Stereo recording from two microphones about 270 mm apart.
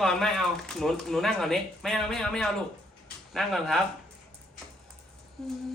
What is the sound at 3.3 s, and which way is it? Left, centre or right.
Speech, centre.